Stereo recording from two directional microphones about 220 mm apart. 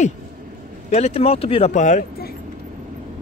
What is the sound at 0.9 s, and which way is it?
Speech, 30° left (ahead or behind).